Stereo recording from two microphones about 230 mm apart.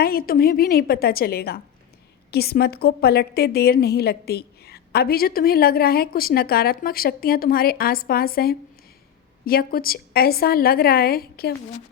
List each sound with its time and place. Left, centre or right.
0.0 s a woman's voice: left